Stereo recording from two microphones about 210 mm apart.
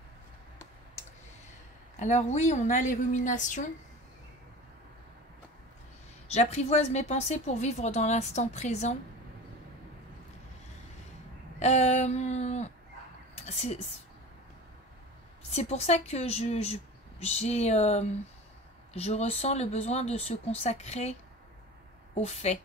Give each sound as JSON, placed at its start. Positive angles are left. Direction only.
{"t": 2.0, "sound": "speech", "side_deg": 35}
{"t": 6.2, "sound": "speech", "side_deg": 30}
{"t": 11.6, "sound": "speech", "side_deg": 35}
{"t": 15.5, "sound": "speech", "side_deg": 30}